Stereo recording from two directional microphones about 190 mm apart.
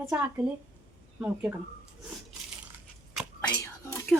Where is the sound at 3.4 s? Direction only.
20° left (ahead or behind).